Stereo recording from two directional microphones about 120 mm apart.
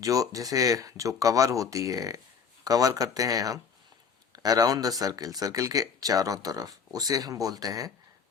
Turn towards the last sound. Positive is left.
turn(degrees=-30)  # may be behind; listen again after turning